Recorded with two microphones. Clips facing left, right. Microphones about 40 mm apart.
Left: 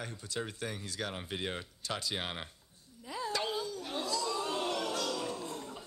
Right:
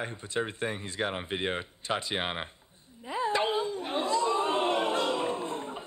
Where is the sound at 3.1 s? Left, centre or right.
Right.